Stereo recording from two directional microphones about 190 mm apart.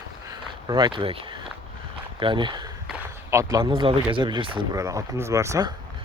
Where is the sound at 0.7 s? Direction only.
20° right (ahead or behind).